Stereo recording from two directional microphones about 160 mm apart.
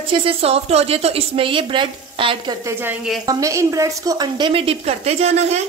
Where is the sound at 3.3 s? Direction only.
20° right (ahead or behind); by 5.6 s 45° right (ahead or behind).